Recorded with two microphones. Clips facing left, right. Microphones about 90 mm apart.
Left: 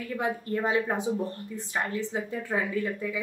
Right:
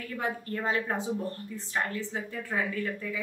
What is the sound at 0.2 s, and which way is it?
A woman's voice, 20° left (ahead or behind).